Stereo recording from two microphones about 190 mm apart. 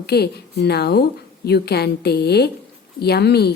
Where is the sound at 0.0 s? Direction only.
60° left (ahead or behind).